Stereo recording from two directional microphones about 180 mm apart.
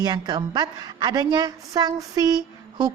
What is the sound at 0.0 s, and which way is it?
A woman's voice, 20° right (ahead or behind).